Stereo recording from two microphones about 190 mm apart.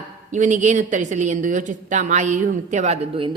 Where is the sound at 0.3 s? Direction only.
40° right (ahead or behind).